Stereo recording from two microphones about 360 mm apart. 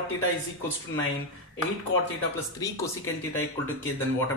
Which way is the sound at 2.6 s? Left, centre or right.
Centre.